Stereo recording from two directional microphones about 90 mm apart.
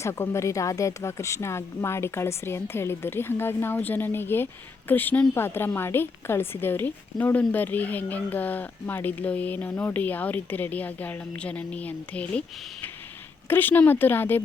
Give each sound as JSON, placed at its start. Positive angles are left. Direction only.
{"t": 0.0, "sound": "a woman's voice", "side_deg": 30}